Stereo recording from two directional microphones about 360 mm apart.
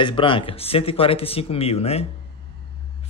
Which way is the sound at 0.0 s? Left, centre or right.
Centre.